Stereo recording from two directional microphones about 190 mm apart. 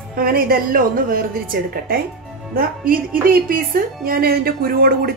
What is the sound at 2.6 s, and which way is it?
A woman's voice, 50° right (ahead or behind).